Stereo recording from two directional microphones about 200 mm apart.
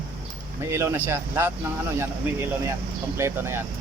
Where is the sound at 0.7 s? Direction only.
10° right (ahead or behind).